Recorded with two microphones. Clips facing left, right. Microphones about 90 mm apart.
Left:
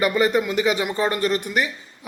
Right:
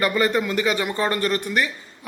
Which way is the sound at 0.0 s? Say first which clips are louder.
Left 1 dB; 15° left (ahead or behind).